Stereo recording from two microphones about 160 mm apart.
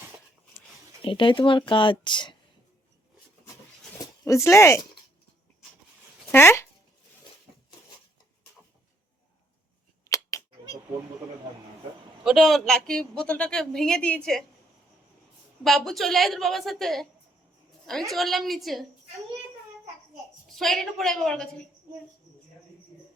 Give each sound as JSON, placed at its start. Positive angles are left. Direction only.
{"t": 1.0, "sound": "speech", "side_deg": 30}
{"t": 4.4, "sound": "speech", "side_deg": 15}
{"t": 6.3, "sound": "speech", "side_deg": 15}
{"t": 10.0, "sound": "scissors", "side_deg": 20}
{"t": 12.2, "sound": "speech", "side_deg": 0}
{"t": 15.6, "sound": "speech", "side_deg": 0}
{"t": 18.1, "sound": "speech", "side_deg": 0}
{"t": 20.5, "sound": "speech", "side_deg": 0}